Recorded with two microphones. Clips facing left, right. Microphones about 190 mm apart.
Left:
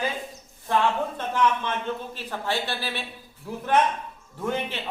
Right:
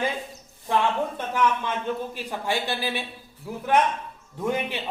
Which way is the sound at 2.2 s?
15° right (ahead or behind).